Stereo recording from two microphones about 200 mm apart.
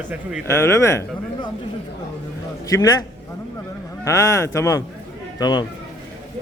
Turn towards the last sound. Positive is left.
turn(degrees=20)  # may be behind; listen again after turning